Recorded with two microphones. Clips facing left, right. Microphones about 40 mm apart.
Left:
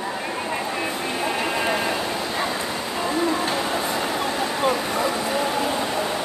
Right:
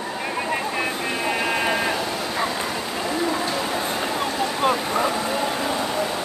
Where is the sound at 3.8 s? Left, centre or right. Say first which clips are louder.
Even; right.